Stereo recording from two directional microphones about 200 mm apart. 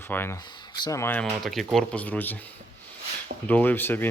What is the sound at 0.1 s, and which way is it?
Speech, 10° left (ahead or behind).